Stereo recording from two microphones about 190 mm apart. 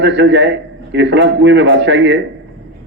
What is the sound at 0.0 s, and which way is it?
A man's voice, 70° right (ahead or behind).